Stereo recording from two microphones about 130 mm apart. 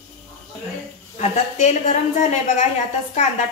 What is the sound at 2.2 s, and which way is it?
Speech, 60° left (ahead or behind).